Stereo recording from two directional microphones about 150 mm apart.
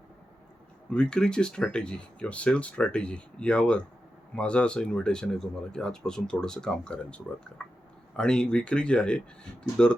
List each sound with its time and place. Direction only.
0.9 s speech: 5° left (ahead or behind)